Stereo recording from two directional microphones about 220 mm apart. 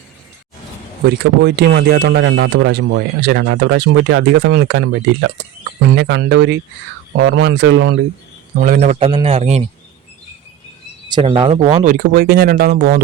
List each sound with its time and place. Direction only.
1.0 s speech: 50° right (ahead or behind)
6.0 s speech: 55° right (ahead or behind)
8.6 s a man's voice: 40° right (ahead or behind)
9.0 s a man's voice: 25° right (ahead or behind)
11.1 s speech: 25° right (ahead or behind); by 13.0 s 45° right (ahead or behind)